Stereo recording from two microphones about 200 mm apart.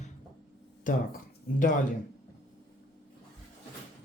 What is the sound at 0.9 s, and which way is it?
Speech, 40° left (ahead or behind).